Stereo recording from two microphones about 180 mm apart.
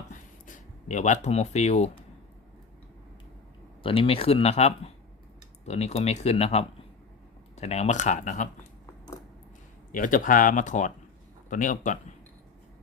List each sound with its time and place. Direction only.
0.1 s a sound: 45° left (ahead or behind)
3.8 s speech: 30° left (ahead or behind)
9.9 s speech: 50° left (ahead or behind)